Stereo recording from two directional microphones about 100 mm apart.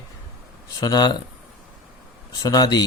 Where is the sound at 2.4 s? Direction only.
40° left (ahead or behind).